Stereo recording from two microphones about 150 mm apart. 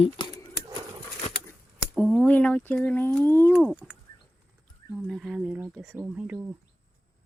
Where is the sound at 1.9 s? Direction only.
Centre (ahead or behind).